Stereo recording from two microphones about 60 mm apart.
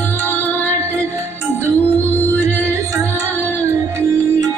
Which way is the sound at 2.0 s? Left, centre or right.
Left.